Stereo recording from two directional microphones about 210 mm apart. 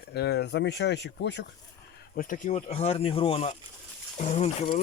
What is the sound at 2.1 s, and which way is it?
Speech, 40° left (ahead or behind).